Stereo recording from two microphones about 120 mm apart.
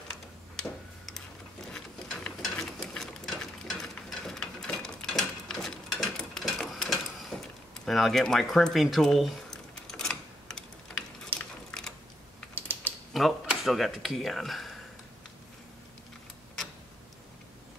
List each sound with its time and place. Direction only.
0.1 s tick-tock: 5° left (ahead or behind)
1.7 s ratchet: 5° left (ahead or behind)
7.8 s squish: centre (ahead or behind)
11.3 s a sound: 5° left (ahead or behind)
12.5 s typing: 15° right (ahead or behind)
13.1 s speech: centre (ahead or behind)